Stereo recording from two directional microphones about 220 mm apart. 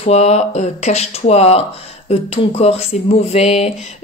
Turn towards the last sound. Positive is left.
turn(degrees=30)  # may be behind; listen again after turning